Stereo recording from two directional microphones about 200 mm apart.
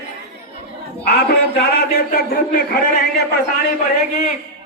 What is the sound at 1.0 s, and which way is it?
A man's voice, 55° left (ahead or behind).